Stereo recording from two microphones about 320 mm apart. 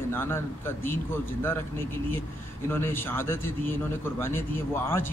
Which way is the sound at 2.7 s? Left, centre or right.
Centre.